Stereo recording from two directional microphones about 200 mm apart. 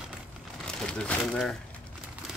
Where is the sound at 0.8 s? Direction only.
5° left (ahead or behind).